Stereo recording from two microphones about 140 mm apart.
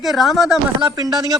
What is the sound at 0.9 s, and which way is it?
Speech, 30° right (ahead or behind).